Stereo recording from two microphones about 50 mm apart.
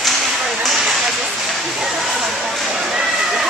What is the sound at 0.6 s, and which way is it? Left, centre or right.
Speech, centre.